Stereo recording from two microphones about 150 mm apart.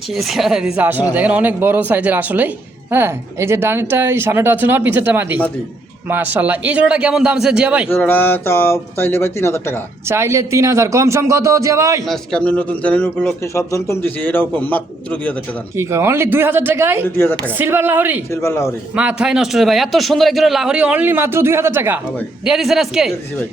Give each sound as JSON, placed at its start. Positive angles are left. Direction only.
{"t": 0.1, "sound": "a man's voice", "side_deg": 0}
{"t": 7.9, "sound": "a man's voice", "side_deg": 15}
{"t": 10.1, "sound": "a man's voice", "side_deg": -20}
{"t": 12.0, "sound": "a man's voice", "side_deg": 5}
{"t": 15.7, "sound": "a man's voice", "side_deg": -20}
{"t": 18.3, "sound": "a man's voice", "side_deg": 15}
{"t": 18.9, "sound": "a man's voice", "side_deg": -5}
{"t": 22.4, "sound": "speech", "side_deg": 0}